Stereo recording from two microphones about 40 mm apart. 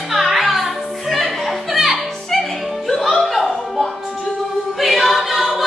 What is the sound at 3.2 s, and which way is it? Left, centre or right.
Music, centre.